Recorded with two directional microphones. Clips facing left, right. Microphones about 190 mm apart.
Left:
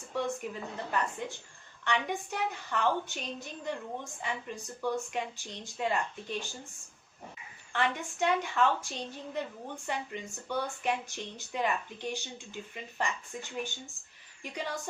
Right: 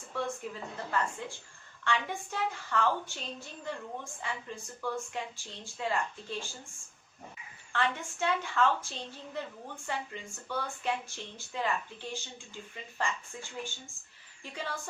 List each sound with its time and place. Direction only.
0.4 s a woman's voice: 15° left (ahead or behind)
7.7 s a woman's voice: 15° left (ahead or behind)